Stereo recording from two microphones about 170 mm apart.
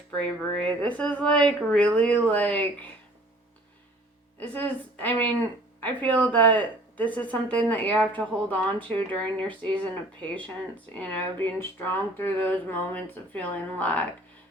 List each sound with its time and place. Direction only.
0.1 s speech: 5° left (ahead or behind)
4.4 s speech: 10° left (ahead or behind)